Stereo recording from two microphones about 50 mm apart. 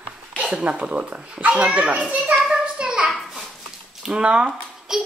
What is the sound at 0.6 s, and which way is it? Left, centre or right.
Speech, right.